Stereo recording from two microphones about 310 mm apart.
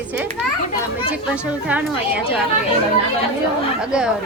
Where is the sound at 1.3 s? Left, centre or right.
Centre.